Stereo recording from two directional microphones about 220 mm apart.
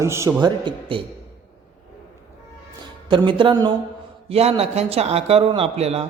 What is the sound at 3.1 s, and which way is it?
Speech, 20° right (ahead or behind).